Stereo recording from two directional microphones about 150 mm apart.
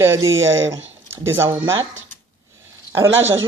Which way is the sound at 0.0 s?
15° right (ahead or behind).